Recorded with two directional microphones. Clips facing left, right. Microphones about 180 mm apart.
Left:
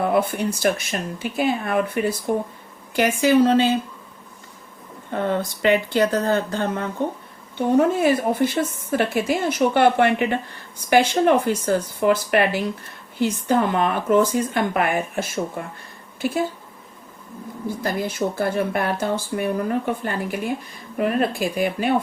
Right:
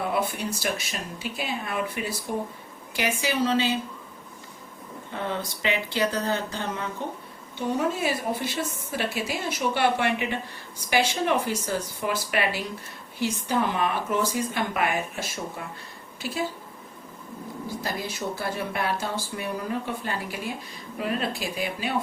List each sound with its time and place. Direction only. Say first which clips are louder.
0.1 s speech: left 7 dB; 50° left (ahead or behind)
5.1 s speech: left 8 dB; 50° left (ahead or behind)
17.8 s speech: left 8 dB; 50° left (ahead or behind)